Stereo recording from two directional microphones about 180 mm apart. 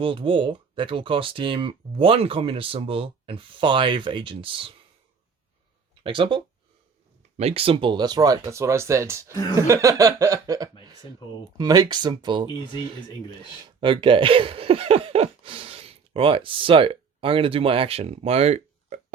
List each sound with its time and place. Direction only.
0.0 s speech: 30° right (ahead or behind)
6.0 s speech: 30° right (ahead or behind)
9.6 s chuckle: 15° right (ahead or behind)
11.2 s speech: 25° left (ahead or behind)
11.5 s speech: 20° right (ahead or behind)
13.7 s speech: 30° right (ahead or behind)